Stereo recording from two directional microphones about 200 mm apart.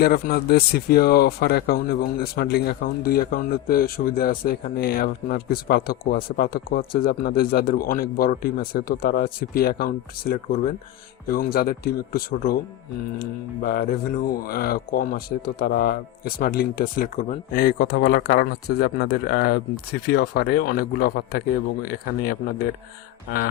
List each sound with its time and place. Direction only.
0.0 s speech: 50° left (ahead or behind)